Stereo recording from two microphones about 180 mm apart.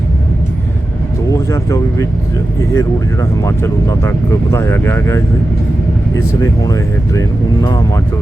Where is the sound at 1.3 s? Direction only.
20° left (ahead or behind).